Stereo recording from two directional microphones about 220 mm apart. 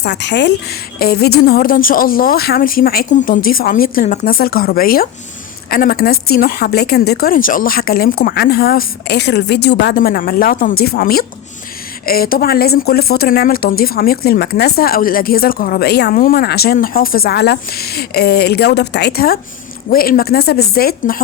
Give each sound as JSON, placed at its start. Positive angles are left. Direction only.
{"t": 0.0, "sound": "a woman's voice", "side_deg": 50}